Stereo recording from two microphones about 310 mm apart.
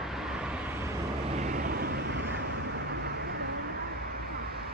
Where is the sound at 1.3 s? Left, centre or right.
Right.